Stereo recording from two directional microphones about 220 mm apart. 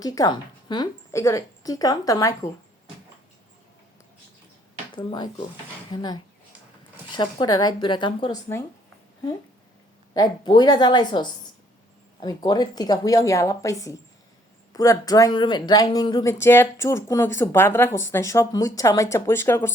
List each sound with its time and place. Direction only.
0.0 s speech: 15° left (ahead or behind)
4.9 s speech: 20° left (ahead or behind)
10.2 s speech: 20° left (ahead or behind)